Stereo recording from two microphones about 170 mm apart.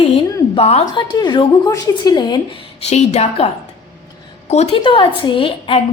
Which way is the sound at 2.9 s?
40° left (ahead or behind).